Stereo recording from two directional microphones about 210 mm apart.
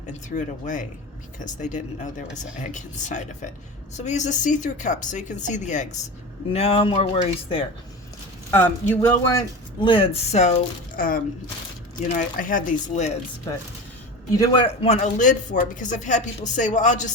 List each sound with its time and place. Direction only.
0.1 s speech: 35° left (ahead or behind)
8.4 s speech: 10° left (ahead or behind)
9.8 s speech: 25° left (ahead or behind)
14.3 s speech: 20° left (ahead or behind); by 17.1 s 35° left (ahead or behind)